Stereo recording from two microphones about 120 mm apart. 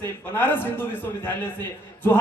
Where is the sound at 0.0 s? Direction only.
20° left (ahead or behind).